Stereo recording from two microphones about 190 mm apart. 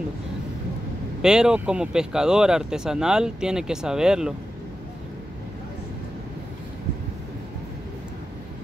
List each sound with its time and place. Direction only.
1.2 s speech: 5° right (ahead or behind)